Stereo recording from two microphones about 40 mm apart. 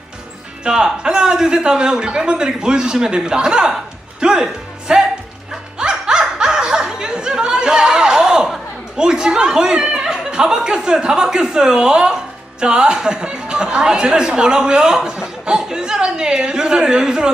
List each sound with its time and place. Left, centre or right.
0.6 s speech: centre
5.7 s laughter: centre
9.0 s speech: centre